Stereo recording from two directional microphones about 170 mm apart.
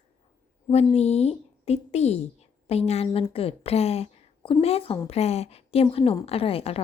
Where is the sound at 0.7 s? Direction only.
40° left (ahead or behind).